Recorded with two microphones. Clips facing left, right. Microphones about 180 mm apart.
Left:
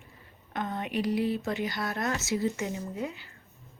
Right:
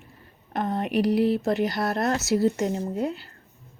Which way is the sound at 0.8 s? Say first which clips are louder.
Right 7 dB; 70° right (ahead or behind).